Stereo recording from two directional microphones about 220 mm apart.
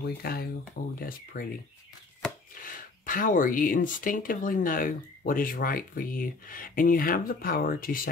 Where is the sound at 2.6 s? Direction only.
40° left (ahead or behind).